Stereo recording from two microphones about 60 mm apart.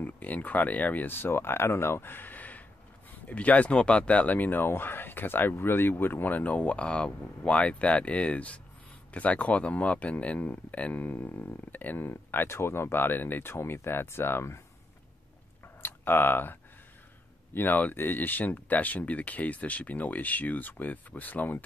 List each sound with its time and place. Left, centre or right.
0.0 s speech: left
15.8 s speech: left
17.6 s speech: left